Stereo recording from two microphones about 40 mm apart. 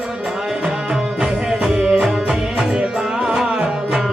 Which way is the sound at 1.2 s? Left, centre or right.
Right.